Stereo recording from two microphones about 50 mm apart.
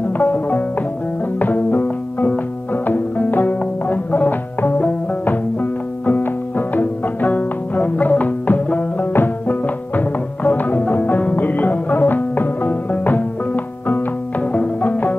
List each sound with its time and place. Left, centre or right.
0.2 s music: left